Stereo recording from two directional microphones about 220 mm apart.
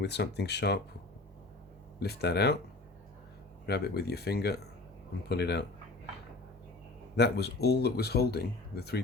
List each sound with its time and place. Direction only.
0.0 s speech: 50° left (ahead or behind)
2.0 s speech: 45° left (ahead or behind)
3.7 s speech: 45° left (ahead or behind)
7.2 s speech: 50° left (ahead or behind)